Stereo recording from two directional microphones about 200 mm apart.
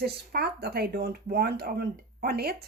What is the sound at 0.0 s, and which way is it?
A woman's voice, 50° right (ahead or behind).